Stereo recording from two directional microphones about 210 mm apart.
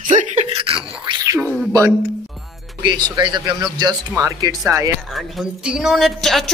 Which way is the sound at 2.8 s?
20° right (ahead or behind).